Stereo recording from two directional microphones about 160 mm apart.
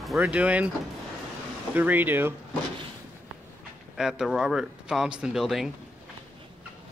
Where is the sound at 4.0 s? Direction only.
5° right (ahead or behind).